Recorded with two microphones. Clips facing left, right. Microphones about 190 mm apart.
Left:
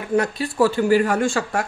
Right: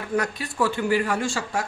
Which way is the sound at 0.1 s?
30° left (ahead or behind).